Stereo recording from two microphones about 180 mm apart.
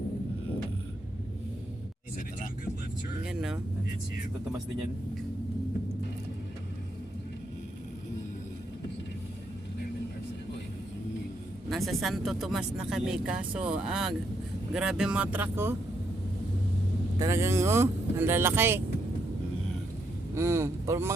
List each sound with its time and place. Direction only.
3.2 s speech: 5° right (ahead or behind)
11.7 s speech: centre (ahead or behind)
17.2 s speech: 15° right (ahead or behind)
20.3 s speech: 15° right (ahead or behind)